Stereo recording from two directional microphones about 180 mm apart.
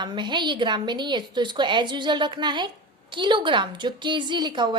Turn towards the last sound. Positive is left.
turn(degrees=-25)  # may be behind; listen again after turning